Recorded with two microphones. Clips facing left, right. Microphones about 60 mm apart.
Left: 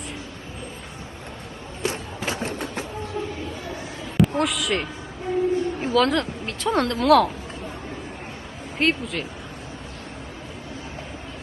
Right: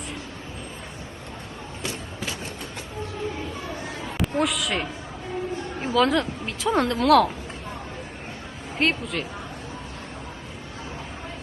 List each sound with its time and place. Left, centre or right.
2.2 s vehicle: left
4.2 s speech: centre
8.8 s speech: centre